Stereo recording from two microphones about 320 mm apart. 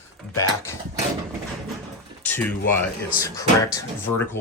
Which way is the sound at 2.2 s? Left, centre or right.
Centre.